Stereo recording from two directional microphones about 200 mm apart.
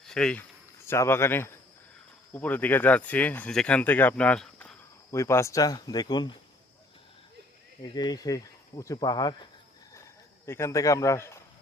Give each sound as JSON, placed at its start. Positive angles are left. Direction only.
{"t": 0.1, "sound": "speech", "side_deg": 5}
{"t": 7.8, "sound": "speech", "side_deg": 20}